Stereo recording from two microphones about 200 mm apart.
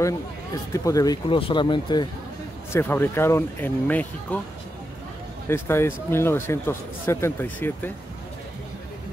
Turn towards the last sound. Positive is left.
turn(degrees=10)  # may be behind; listen again after turning